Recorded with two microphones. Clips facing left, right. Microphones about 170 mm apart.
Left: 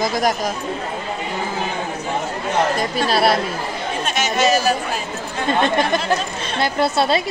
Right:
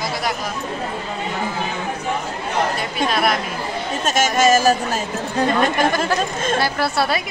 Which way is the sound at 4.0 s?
45° right (ahead or behind).